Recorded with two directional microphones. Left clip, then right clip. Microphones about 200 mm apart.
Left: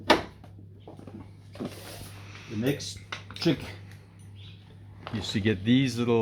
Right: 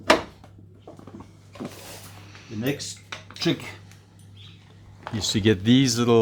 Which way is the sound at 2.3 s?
Centre (ahead or behind).